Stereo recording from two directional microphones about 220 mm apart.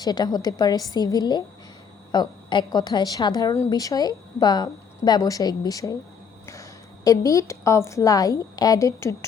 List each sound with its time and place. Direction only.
0.0 s a woman's voice: 20° left (ahead or behind)